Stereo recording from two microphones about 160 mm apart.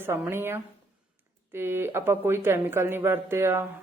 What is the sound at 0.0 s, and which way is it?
A man's voice, 15° right (ahead or behind).